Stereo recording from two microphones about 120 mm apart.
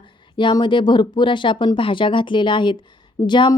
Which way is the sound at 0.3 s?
40° left (ahead or behind).